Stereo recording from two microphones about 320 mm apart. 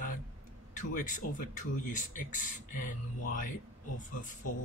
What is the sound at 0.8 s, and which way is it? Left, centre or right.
Speech, left.